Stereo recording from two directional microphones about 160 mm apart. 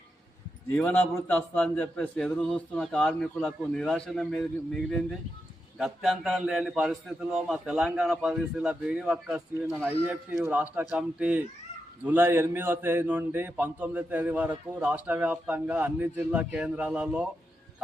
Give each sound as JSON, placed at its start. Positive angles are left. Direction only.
{"t": 0.8, "sound": "a man's voice", "side_deg": 10}